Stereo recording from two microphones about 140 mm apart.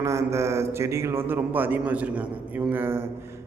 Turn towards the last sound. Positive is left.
turn(degrees=-15)  # may be behind; listen again after turning